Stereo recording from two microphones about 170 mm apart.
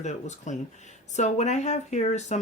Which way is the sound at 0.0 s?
45° left (ahead or behind).